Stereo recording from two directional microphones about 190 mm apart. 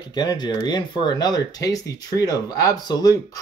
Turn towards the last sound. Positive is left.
turn(degrees=20)  # may be behind; listen again after turning